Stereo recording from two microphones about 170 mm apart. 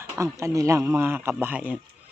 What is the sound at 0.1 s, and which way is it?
Speech, 15° right (ahead or behind).